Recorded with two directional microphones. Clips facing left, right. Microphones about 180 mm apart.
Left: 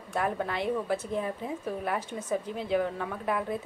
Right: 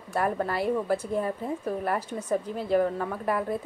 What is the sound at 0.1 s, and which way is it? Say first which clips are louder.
A woman's voice: right 3 dB; centre (ahead or behind).